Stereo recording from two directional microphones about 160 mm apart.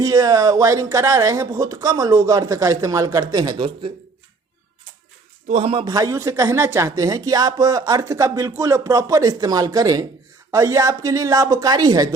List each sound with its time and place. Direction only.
0.0 s speech: 20° right (ahead or behind)
5.5 s a man's voice: 40° right (ahead or behind)
5.8 s speech: 25° right (ahead or behind)